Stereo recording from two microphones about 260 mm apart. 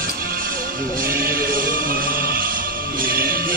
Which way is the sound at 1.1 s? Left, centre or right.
Right.